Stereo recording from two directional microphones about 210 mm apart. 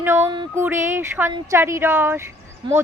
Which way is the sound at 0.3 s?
25° right (ahead or behind).